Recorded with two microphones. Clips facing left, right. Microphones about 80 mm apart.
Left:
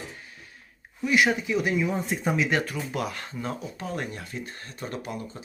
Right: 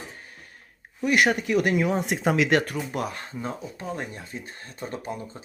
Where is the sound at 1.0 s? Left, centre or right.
Right.